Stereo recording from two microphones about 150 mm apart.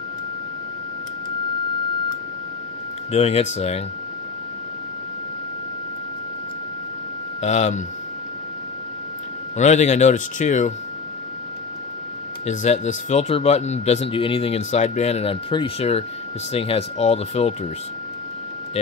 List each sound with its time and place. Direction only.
3.1 s speech: 45° left (ahead or behind)
7.4 s speech: 50° left (ahead or behind)
9.6 s speech: 50° left (ahead or behind)
12.4 s speech: 50° left (ahead or behind)